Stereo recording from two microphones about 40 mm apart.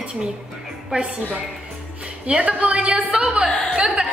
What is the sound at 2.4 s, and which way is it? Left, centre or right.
A woman's voice, right.